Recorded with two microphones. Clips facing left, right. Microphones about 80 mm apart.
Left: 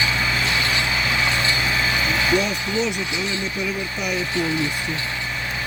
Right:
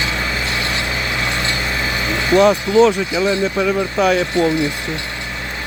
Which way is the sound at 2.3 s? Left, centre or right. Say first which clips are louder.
Right 10 dB; right.